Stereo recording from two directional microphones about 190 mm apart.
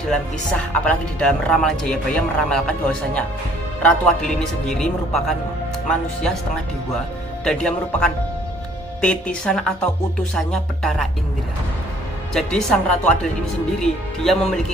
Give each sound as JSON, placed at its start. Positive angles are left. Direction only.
{"t": 0.1, "sound": "speech", "side_deg": 5}
{"t": 7.4, "sound": "speech", "side_deg": 5}
{"t": 12.4, "sound": "speech", "side_deg": 0}